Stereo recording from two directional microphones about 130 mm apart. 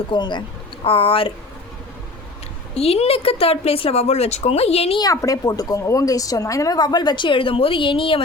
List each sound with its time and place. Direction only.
0.1 s a woman's voice: 35° left (ahead or behind)
2.7 s a woman's voice: 50° left (ahead or behind)
4.9 s speech: 25° left (ahead or behind)